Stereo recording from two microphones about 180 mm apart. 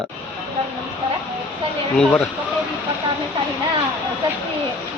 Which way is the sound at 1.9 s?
10° left (ahead or behind).